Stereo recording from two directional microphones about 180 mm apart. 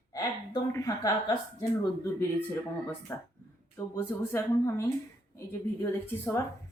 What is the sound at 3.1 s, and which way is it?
A woman's voice, 15° left (ahead or behind).